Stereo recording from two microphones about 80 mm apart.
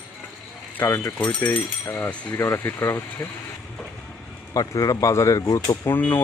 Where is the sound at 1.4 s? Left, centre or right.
Left.